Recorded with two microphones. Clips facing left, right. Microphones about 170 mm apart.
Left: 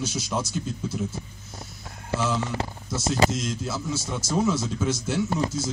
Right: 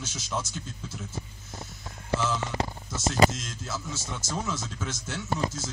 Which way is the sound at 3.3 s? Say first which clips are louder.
Left 7 dB; 15° left (ahead or behind).